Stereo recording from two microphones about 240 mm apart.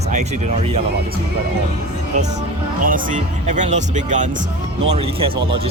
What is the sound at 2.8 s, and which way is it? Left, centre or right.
Speech, right.